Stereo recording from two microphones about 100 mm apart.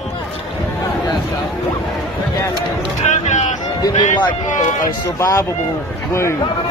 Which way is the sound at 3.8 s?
50° left (ahead or behind).